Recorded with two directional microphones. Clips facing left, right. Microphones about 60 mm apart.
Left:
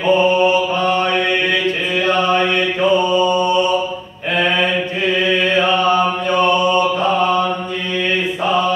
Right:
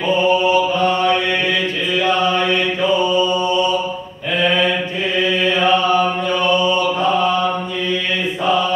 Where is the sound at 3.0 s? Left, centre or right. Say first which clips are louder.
Left 2 dB; left.